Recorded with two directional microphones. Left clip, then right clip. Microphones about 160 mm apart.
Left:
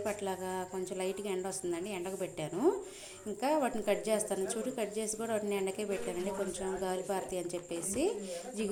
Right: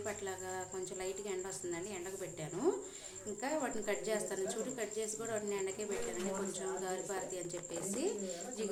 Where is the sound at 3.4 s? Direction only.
30° left (ahead or behind).